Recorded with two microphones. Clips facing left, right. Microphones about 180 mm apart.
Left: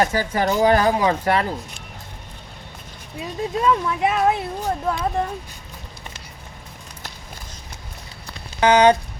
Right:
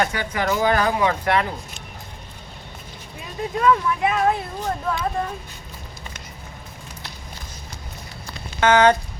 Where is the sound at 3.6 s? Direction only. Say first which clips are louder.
Right 1 dB; 20° left (ahead or behind).